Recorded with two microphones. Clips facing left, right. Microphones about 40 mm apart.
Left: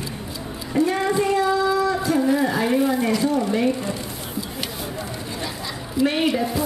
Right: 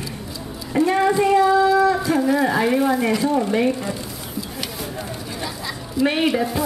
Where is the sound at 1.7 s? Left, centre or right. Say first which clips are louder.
Right 3 dB; centre.